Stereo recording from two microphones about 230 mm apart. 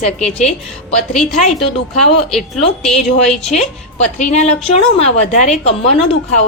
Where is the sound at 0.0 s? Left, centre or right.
Left.